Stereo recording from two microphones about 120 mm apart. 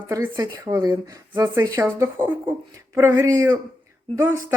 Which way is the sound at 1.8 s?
15° right (ahead or behind).